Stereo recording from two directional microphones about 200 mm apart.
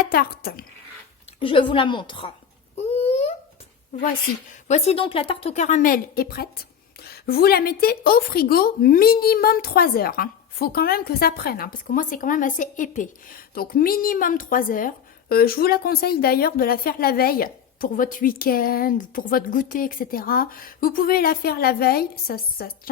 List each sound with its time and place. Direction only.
0.0 s a woman's voice: 45° left (ahead or behind)
1.4 s a woman's voice: 25° left (ahead or behind)
2.7 s babbling: 30° left (ahead or behind)
3.9 s a woman's voice: 35° left (ahead or behind)